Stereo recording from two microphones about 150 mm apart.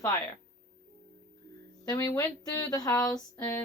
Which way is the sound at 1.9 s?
25° left (ahead or behind).